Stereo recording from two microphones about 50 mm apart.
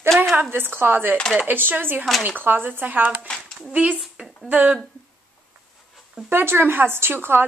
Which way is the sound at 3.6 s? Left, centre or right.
Right.